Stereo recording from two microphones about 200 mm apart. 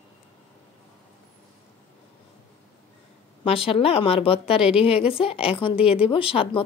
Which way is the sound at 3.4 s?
30° left (ahead or behind).